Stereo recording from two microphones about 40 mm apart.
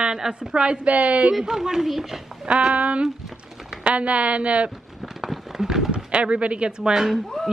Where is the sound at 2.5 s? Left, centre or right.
Right.